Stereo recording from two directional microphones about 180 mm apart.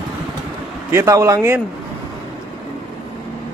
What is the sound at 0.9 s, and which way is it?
Speech, 15° right (ahead or behind).